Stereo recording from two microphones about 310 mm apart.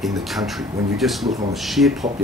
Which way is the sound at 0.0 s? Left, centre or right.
Centre.